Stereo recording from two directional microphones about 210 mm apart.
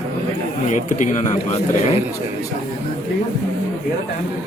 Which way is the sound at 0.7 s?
35° left (ahead or behind).